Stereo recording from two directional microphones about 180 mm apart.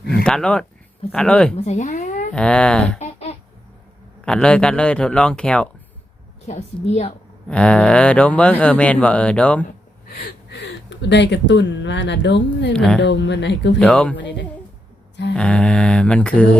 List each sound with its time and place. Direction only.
0.2 s speech: 5° left (ahead or behind)
1.5 s speech: 40° left (ahead or behind)
2.3 s speech: 5° left (ahead or behind)
3.0 s a sound: 35° left (ahead or behind)
4.3 s speech: 5° left (ahead or behind)
6.5 s a woman's voice: 40° left (ahead or behind)
7.4 s speech: 5° left (ahead or behind)
10.1 s speech: 65° left (ahead or behind)
12.7 s speech: 5° left (ahead or behind)
13.0 s speech: 75° left (ahead or behind)
13.7 s speech: 5° left (ahead or behind)
14.2 s speech: 75° left (ahead or behind)
15.4 s speech: 5° left (ahead or behind)